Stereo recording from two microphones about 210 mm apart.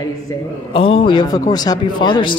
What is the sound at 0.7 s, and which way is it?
Speech, 25° left (ahead or behind).